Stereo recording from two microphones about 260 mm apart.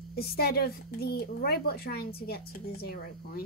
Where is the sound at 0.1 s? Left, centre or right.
Left.